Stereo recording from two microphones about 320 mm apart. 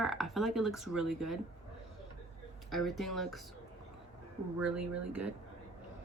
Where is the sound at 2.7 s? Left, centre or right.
Centre.